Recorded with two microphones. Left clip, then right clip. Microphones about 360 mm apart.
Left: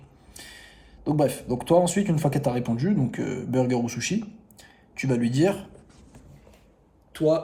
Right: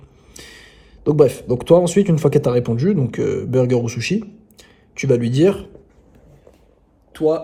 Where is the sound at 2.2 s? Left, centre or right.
Right.